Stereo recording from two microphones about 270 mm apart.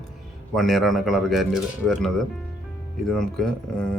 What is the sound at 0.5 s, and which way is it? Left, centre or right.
Speech, centre.